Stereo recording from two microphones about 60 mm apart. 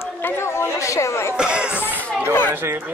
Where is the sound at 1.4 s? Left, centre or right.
Centre.